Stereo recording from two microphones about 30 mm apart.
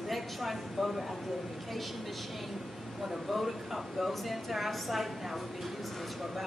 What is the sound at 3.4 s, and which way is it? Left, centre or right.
A woman's voice, centre.